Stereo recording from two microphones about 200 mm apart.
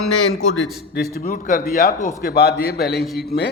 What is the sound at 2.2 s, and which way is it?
Speech, 50° left (ahead or behind).